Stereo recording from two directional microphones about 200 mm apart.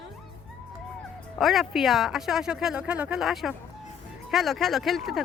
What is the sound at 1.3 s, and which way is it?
Speech, centre (ahead or behind).